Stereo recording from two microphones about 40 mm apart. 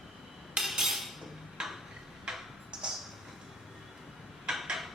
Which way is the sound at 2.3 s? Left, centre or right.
Centre.